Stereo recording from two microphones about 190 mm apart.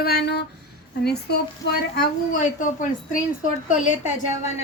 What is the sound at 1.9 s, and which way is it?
A woman's voice, 45° left (ahead or behind).